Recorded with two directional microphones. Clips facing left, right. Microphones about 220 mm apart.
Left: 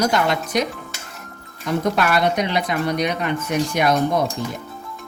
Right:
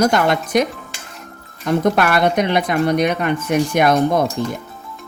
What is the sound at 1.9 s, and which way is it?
Speech, 55° right (ahead or behind).